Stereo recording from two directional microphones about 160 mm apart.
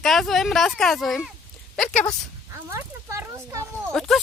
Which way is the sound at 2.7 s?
15° right (ahead or behind).